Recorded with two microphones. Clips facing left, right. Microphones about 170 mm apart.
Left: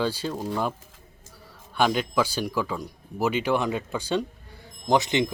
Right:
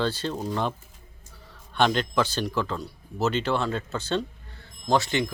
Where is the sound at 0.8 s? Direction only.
90° left.